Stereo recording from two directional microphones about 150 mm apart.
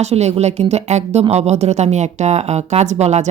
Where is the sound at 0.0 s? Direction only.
45° right (ahead or behind).